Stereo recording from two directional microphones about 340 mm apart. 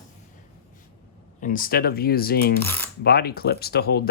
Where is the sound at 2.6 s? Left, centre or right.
Centre.